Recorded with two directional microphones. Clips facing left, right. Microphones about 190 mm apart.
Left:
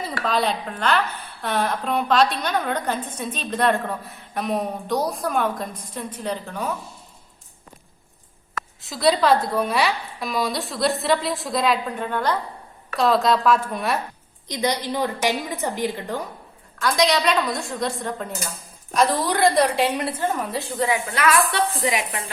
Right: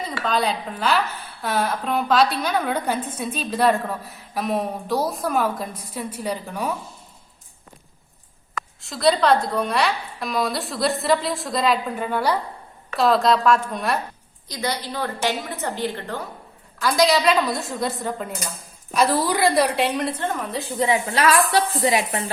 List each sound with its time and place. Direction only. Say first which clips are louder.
0.1 s a woman's voice: even; centre (ahead or behind)
8.8 s a woman's voice: even; centre (ahead or behind)
14.4 s a woman's voice: left 3 dB; 20° left (ahead or behind)
16.8 s a woman's voice: right 2 dB; centre (ahead or behind)
20.7 s a woman's voice: right 3 dB; 20° right (ahead or behind)